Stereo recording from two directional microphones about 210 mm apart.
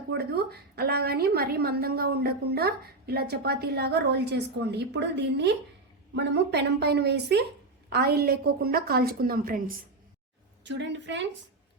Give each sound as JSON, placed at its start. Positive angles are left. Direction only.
{"t": 0.1, "sound": "a woman's voice", "side_deg": -50}
{"t": 10.6, "sound": "a woman's voice", "side_deg": -60}